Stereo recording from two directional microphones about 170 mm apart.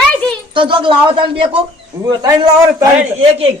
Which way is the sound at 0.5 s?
30° right (ahead or behind).